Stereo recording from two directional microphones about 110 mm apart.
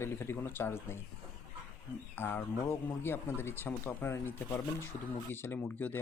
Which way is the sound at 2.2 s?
20° left (ahead or behind).